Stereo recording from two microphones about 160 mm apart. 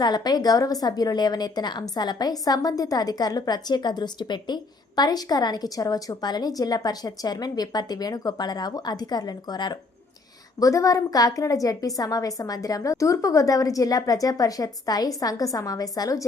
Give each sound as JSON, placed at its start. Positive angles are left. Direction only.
{"t": 0.0, "sound": "a woman's voice", "side_deg": 25}